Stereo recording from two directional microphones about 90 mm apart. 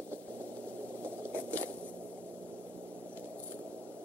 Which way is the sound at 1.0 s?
20° right (ahead or behind).